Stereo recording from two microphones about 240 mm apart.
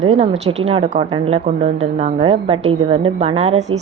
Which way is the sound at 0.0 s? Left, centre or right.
Right.